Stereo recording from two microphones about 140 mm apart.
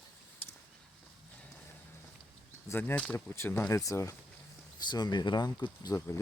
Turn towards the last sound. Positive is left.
turn(degrees=20)  # may be behind; listen again after turning